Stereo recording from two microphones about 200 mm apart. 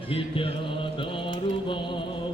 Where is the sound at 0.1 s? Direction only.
25° left (ahead or behind).